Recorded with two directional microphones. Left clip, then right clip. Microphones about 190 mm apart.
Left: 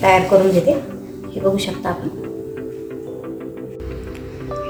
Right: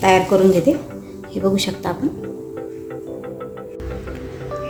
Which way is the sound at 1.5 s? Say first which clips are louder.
Even; 45° right (ahead or behind).